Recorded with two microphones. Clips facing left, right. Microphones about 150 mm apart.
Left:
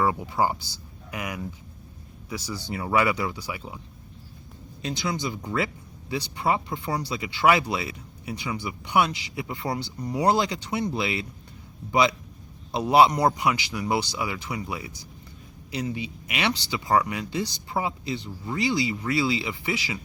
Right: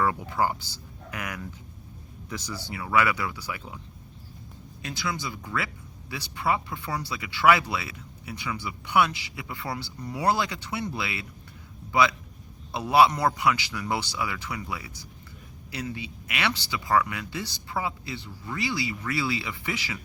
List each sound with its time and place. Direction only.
0.0 s speech: 15° left (ahead or behind)
2.7 s speech: 30° left (ahead or behind)
3.1 s speech: 20° left (ahead or behind)
4.8 s speech: 20° left (ahead or behind)